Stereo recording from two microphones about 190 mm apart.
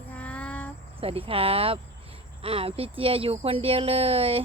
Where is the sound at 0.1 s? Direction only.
5° left (ahead or behind).